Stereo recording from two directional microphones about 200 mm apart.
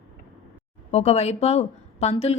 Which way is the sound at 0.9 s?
30° left (ahead or behind).